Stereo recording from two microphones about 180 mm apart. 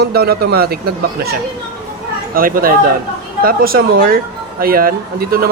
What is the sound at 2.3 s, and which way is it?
Speech, 50° right (ahead or behind).